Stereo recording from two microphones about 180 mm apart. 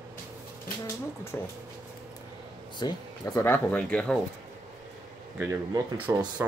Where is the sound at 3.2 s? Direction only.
15° left (ahead or behind).